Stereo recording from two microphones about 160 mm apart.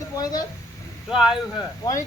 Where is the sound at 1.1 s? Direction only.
5° right (ahead or behind).